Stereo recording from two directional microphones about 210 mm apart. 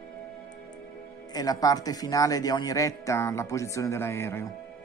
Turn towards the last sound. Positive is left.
turn(degrees=10)  # may be behind; listen again after turning